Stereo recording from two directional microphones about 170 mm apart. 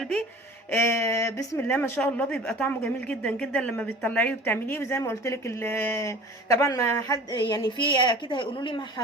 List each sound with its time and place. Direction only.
0.7 s speech: 15° left (ahead or behind)